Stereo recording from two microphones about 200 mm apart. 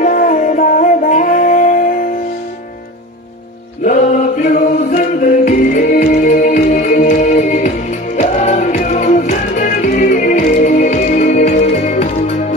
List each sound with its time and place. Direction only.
0.0 s music: 40° left (ahead or behind)
3.8 s a capella: 40° left (ahead or behind)
8.2 s music: 35° left (ahead or behind)